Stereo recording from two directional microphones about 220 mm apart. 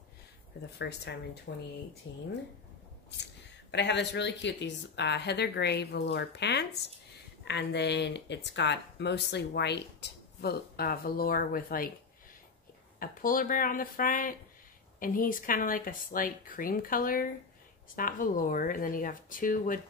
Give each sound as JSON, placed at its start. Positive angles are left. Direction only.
{"t": 0.7, "sound": "speech", "side_deg": 50}
{"t": 3.7, "sound": "speech", "side_deg": 50}
{"t": 13.0, "sound": "speech", "side_deg": 40}